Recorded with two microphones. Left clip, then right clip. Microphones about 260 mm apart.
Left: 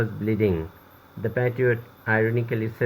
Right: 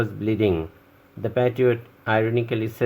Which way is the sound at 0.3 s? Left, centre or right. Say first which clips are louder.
Right 2 dB; right.